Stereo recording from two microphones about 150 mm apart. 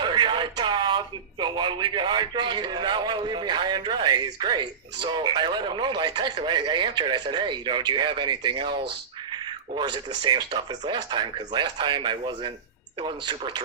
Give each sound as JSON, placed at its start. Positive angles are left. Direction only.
{"t": 0.0, "sound": "speech", "side_deg": -30}